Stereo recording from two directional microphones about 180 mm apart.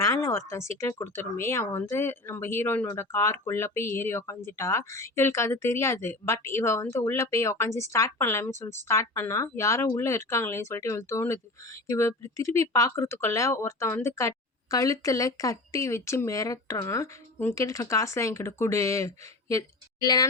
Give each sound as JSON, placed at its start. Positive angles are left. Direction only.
{"t": 0.0, "sound": "speech", "side_deg": 15}